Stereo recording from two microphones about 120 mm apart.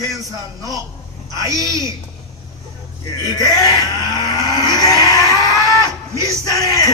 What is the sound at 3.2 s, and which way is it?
Livestock, 35° left (ahead or behind).